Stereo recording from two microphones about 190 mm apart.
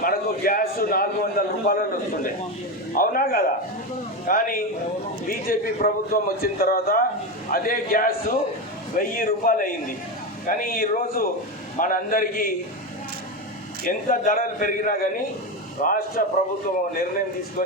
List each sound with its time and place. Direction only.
0.0 s a man's voice: 50° left (ahead or behind)
13.8 s a man's voice: 50° left (ahead or behind)